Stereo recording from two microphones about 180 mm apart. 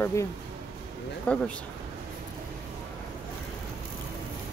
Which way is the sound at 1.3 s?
5° left (ahead or behind).